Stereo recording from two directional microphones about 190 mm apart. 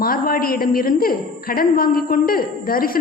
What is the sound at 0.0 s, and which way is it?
A woman's voice, 50° left (ahead or behind).